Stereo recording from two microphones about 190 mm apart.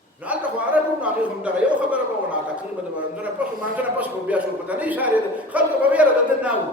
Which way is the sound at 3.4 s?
5° right (ahead or behind).